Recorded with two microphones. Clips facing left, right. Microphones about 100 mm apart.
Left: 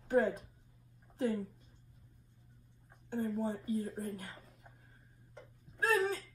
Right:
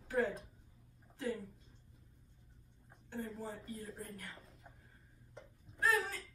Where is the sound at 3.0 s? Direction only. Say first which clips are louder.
Left 7 dB; 35° left (ahead or behind).